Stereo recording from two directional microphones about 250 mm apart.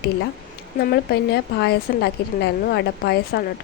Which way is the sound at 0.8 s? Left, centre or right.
Left.